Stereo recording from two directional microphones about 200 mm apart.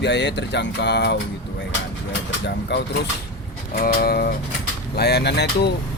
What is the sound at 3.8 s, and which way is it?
Speech, 50° left (ahead or behind).